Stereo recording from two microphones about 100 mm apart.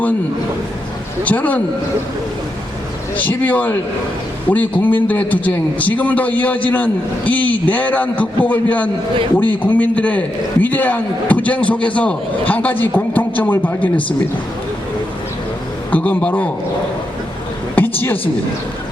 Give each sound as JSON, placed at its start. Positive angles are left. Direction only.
{"t": 1.2, "sound": "a man's voice", "side_deg": 15}
{"t": 3.2, "sound": "a man's voice", "side_deg": 15}
{"t": 15.9, "sound": "a man's voice", "side_deg": 15}
{"t": 17.7, "sound": "a sound", "side_deg": 20}